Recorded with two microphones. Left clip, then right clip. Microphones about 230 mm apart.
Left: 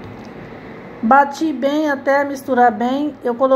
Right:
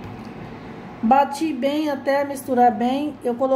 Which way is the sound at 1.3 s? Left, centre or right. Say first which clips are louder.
Left 4 dB; centre.